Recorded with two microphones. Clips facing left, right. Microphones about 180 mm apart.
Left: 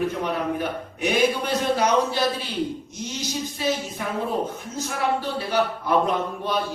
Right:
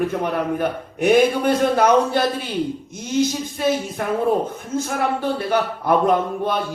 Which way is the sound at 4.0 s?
55° right (ahead or behind).